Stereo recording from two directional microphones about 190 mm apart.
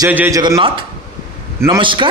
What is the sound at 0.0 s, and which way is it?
Speech, 15° right (ahead or behind).